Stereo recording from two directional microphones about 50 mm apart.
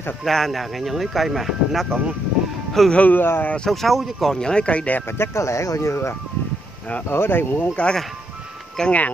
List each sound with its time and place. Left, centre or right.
0.2 s speech: centre
2.9 s speech: left
3.2 s speech: left
3.7 s speech: centre
4.3 s speech: centre
5.1 s speech: left
7.1 s speech: left
7.7 s speech: left